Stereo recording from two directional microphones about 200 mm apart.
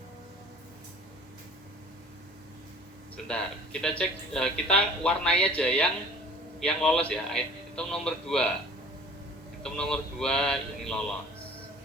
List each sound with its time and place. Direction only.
3.2 s speech: 5° left (ahead or behind)
9.6 s speech: 5° left (ahead or behind)